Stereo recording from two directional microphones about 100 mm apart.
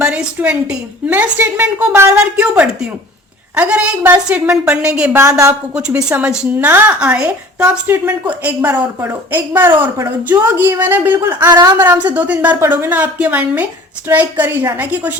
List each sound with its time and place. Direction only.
0.0 s a woman's voice: 10° right (ahead or behind)
7.9 s a woman's voice: 20° right (ahead or behind)
11.5 s speech: 45° right (ahead or behind)
11.8 s a woman's voice: 15° right (ahead or behind)